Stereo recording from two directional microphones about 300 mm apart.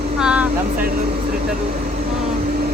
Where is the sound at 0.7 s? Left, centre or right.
Right.